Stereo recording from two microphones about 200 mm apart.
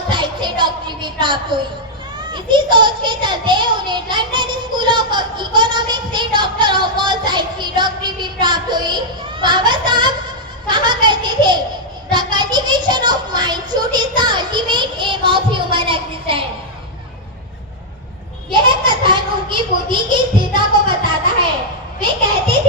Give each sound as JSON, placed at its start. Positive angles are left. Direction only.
{"t": 0.1, "sound": "a sound", "side_deg": -25}
{"t": 2.3, "sound": "a child's voice", "side_deg": -25}
{"t": 18.5, "sound": "a child's voice", "side_deg": -25}